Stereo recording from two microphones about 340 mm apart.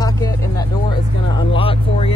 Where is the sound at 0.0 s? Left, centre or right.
Centre.